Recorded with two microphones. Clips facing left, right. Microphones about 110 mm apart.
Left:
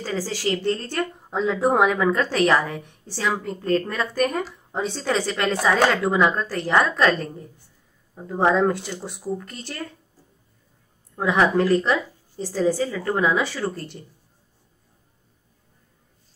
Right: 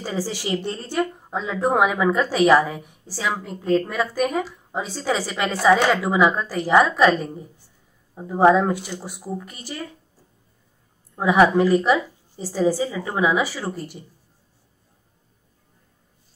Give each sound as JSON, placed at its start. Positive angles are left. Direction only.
{"t": 0.0, "sound": "a woman's voice", "side_deg": -15}
{"t": 1.1, "sound": "a woman's voice", "side_deg": 0}
{"t": 11.1, "sound": "a woman's voice", "side_deg": -10}